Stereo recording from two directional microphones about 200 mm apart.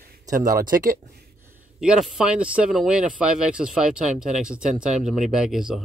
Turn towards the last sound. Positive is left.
turn(degrees=-5)  # may be behind; listen again after turning